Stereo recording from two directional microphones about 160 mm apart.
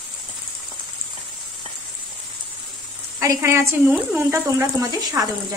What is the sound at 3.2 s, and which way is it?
A woman's voice, 15° right (ahead or behind).